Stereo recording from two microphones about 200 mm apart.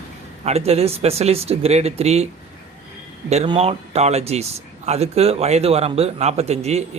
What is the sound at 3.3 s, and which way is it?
Speech, 30° right (ahead or behind).